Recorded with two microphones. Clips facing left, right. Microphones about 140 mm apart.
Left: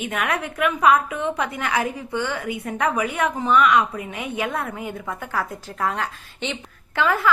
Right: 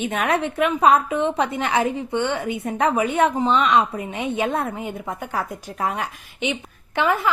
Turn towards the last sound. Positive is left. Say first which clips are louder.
# right 1 dB
turn(degrees=-20)  # may be behind; listen again after turning